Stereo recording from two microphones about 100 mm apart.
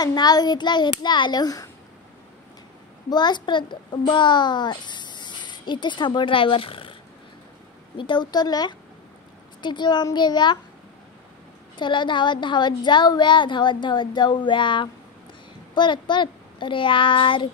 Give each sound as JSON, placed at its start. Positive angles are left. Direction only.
{"t": 0.0, "sound": "speech", "side_deg": 45}
{"t": 3.1, "sound": "a child's voice", "side_deg": 45}
{"t": 8.0, "sound": "speech", "side_deg": 50}
{"t": 11.7, "sound": "a child's voice", "side_deg": 50}